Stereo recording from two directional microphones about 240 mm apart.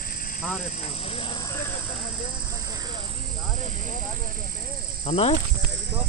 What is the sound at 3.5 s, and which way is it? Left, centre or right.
Speech, right.